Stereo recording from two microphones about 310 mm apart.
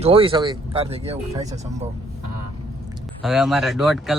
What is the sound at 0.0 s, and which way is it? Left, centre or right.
Speech, centre.